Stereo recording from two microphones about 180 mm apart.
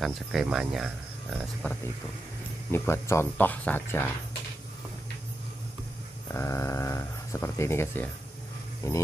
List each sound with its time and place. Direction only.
0.0 s speech: centre (ahead or behind)
2.7 s speech: 15° left (ahead or behind)
6.3 s speech: 15° left (ahead or behind)